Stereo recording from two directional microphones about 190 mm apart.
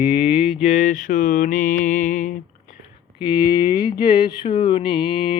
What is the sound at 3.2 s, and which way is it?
Speech, 25° left (ahead or behind).